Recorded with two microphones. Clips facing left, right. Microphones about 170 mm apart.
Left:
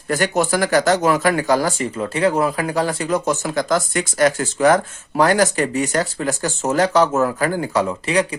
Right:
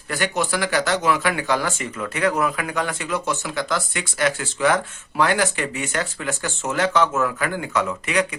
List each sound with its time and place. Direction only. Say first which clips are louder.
0.1 s speech: left 5 dB; 45° left (ahead or behind)